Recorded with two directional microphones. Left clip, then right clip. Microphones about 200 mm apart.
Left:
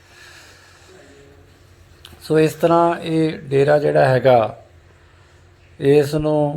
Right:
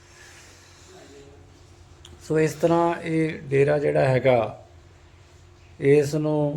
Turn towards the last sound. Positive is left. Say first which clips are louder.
# left 6 dB
turn(degrees=15)  # may be behind; listen again after turning